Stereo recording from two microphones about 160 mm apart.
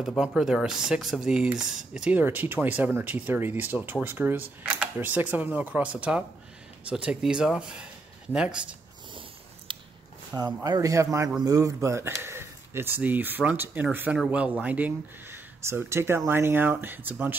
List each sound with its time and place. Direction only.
0.0 s speech: centre (ahead or behind)
9.7 s a sound: 30° right (ahead or behind)
10.3 s speech: 25° right (ahead or behind)